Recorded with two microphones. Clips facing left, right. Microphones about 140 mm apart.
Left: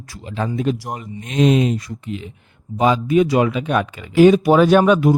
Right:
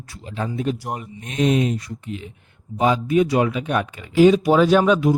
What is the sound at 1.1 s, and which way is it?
Speech, 90° left.